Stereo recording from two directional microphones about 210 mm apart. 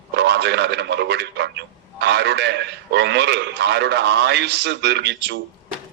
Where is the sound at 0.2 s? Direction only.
55° right (ahead or behind).